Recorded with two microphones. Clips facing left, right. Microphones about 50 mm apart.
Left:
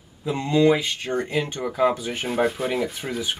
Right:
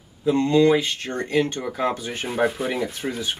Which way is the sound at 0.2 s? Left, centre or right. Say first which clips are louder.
Right 2 dB; centre.